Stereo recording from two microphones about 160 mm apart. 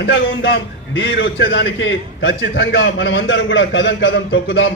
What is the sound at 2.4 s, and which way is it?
Speech, 90° left.